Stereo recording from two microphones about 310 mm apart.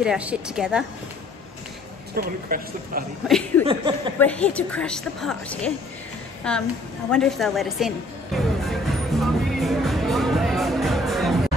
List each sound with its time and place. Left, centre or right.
0.0 s a woman's voice: centre
2.1 s speech: right
3.3 s a woman's voice: centre
3.6 s speech: centre
4.2 s a woman's voice: centre
8.6 s music: centre